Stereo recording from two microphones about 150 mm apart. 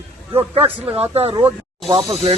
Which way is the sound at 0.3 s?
30° right (ahead or behind).